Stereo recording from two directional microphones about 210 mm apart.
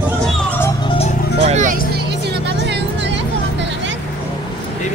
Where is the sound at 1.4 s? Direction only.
35° right (ahead or behind).